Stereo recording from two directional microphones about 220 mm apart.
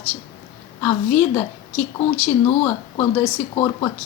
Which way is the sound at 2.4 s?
25° left (ahead or behind).